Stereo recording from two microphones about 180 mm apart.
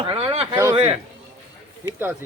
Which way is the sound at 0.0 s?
25° right (ahead or behind).